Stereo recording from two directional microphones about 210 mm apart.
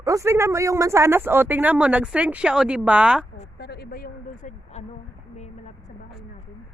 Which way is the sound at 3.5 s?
50° left (ahead or behind).